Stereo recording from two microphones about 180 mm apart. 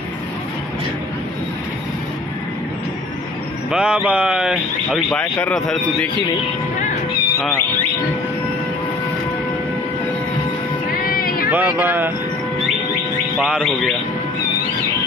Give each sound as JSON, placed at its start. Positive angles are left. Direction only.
{"t": 3.7, "sound": "speech", "side_deg": -5}
{"t": 11.0, "sound": "music", "side_deg": 55}
{"t": 11.5, "sound": "speech", "side_deg": -10}
{"t": 13.4, "sound": "speech", "side_deg": -5}